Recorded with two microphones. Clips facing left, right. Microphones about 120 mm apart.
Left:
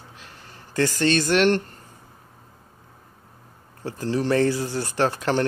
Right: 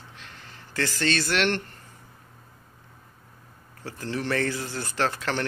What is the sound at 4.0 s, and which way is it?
Speech, 35° left (ahead or behind).